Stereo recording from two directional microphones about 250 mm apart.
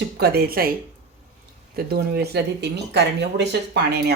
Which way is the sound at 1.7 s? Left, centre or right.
Right.